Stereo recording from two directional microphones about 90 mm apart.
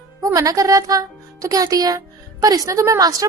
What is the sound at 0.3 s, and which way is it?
A woman's voice, 40° right (ahead or behind).